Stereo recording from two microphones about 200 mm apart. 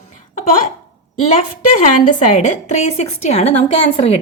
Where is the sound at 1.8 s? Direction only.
40° left (ahead or behind).